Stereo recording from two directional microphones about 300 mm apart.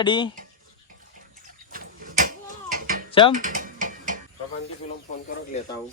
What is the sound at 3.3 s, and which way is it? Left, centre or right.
Mechanisms, right.